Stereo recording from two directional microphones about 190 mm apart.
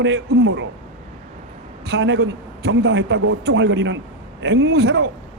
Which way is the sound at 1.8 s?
65° right (ahead or behind).